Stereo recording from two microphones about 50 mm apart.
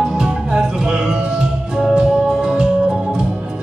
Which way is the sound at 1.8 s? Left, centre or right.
Centre.